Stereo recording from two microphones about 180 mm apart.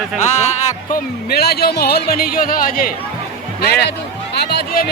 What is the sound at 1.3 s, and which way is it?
Speech, 60° left (ahead or behind).